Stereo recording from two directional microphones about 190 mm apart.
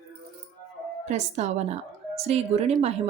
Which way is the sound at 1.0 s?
35° right (ahead or behind).